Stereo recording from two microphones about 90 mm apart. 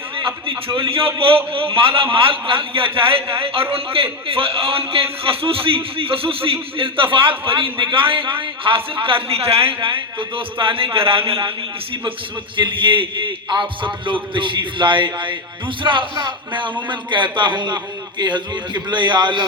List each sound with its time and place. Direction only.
0.2 s a man's voice: 75° right (ahead or behind); by 11.3 s 90° right
12.5 s a man's voice: 65° right (ahead or behind)